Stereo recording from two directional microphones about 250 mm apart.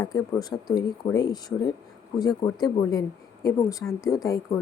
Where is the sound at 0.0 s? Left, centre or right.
Centre.